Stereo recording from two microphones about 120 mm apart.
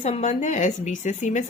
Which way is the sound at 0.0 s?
65° left (ahead or behind).